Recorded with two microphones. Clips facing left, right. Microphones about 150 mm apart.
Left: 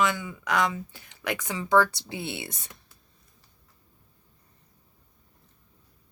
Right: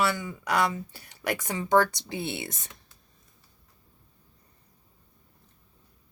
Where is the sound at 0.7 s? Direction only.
40° right (ahead or behind).